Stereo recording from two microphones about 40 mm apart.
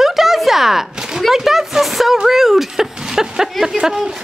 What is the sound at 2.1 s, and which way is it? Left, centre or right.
Speech, centre.